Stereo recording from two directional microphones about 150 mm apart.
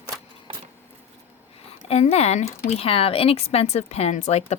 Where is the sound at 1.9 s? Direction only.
45° left (ahead or behind).